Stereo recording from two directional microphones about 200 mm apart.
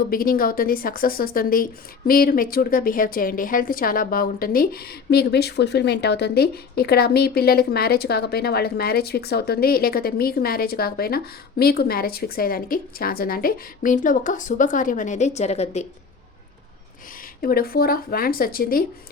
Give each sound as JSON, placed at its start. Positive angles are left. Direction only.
{"t": 0.1, "sound": "speech", "side_deg": 45}
{"t": 17.4, "sound": "speech", "side_deg": 50}